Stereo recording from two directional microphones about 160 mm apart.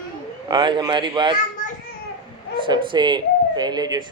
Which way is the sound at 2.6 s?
30° right (ahead or behind).